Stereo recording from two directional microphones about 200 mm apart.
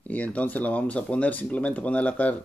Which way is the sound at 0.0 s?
10° left (ahead or behind).